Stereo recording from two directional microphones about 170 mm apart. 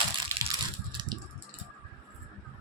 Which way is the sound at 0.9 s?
25° right (ahead or behind).